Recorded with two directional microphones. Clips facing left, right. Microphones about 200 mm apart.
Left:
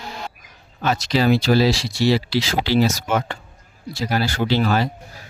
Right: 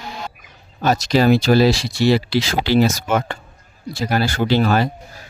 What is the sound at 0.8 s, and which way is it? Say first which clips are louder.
Speech: right 3 dB; 40° right (ahead or behind).